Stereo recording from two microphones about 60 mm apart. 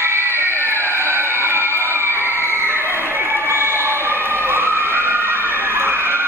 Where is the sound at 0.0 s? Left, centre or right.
Right.